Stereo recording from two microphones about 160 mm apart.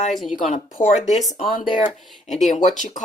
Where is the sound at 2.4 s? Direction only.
50° left (ahead or behind).